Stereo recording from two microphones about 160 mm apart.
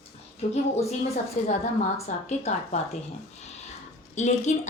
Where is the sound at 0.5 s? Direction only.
40° left (ahead or behind).